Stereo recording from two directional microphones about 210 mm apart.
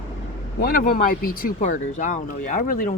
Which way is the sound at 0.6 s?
40° left (ahead or behind).